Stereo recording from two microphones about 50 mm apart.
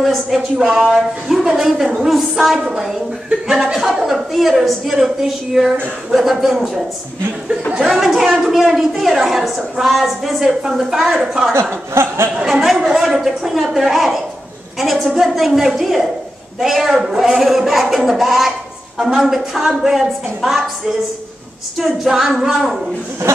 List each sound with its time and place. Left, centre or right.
0.0 s a woman's voice: centre
7.9 s a woman's voice: centre
11.9 s a sound: right
12.4 s a woman's voice: centre